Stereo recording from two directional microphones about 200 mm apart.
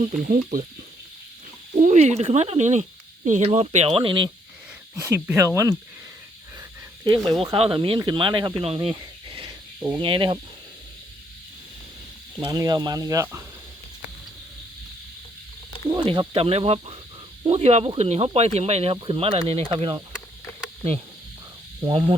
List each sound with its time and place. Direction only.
0.0 s speech: 40° right (ahead or behind)
1.8 s speech: 35° right (ahead or behind)
5.0 s speech: 10° right (ahead or behind)
6.6 s speech: 20° right (ahead or behind)
9.5 s cricket: 20° right (ahead or behind)
12.4 s speech: 20° right (ahead or behind)
16.0 s speech: 25° right (ahead or behind)
21.8 s speech: 25° right (ahead or behind)